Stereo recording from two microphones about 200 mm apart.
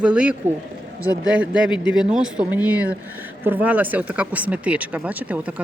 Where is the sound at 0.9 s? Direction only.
15° left (ahead or behind).